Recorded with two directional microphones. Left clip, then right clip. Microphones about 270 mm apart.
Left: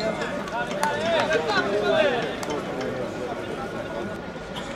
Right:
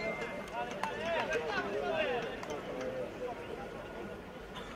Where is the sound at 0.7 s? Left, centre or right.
Left.